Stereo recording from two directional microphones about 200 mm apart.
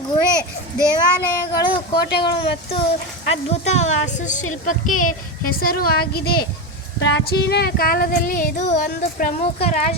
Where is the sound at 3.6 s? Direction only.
35° left (ahead or behind).